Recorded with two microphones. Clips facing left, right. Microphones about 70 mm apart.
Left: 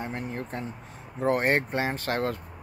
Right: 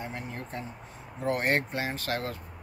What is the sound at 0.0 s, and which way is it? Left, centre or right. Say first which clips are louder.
Speech: left 4 dB; left.